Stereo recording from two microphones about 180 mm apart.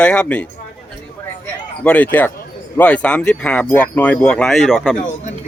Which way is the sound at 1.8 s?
10° left (ahead or behind).